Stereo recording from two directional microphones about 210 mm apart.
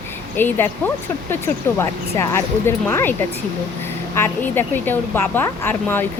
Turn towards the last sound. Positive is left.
turn(degrees=10)  # may be behind; listen again after turning